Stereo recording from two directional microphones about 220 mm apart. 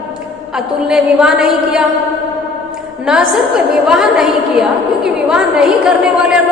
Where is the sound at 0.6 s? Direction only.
5° right (ahead or behind).